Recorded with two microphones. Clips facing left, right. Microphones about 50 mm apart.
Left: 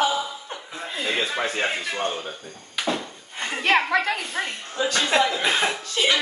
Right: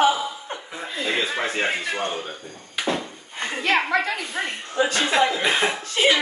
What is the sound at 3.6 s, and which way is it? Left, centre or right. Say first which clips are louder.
Speech: left 1 dB; left.